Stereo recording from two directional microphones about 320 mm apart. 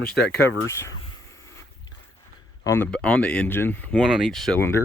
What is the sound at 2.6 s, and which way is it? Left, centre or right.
Speech, centre.